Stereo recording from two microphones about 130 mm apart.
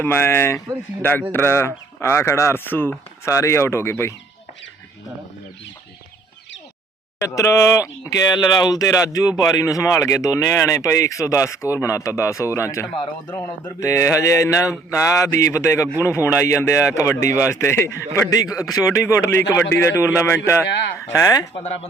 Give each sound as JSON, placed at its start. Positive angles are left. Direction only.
{"t": 0.0, "sound": "speech", "side_deg": 15}
{"t": 7.2, "sound": "speech", "side_deg": 25}